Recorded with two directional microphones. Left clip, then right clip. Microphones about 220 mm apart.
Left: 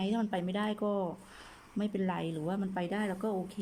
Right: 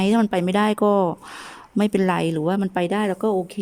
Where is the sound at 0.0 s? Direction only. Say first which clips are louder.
Right 14 dB; 55° right (ahead or behind).